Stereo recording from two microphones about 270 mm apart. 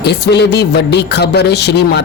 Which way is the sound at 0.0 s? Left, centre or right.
Left.